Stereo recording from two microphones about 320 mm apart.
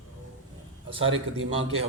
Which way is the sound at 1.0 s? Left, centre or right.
Right.